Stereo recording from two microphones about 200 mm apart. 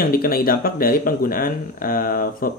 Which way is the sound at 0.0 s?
45° left (ahead or behind).